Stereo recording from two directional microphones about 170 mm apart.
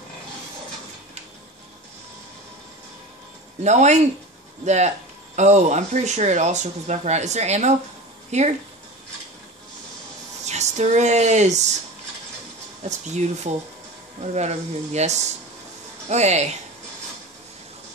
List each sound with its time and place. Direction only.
3.6 s speech: 45° right (ahead or behind)
10.4 s speech: 40° right (ahead or behind)
12.8 s speech: 45° right (ahead or behind)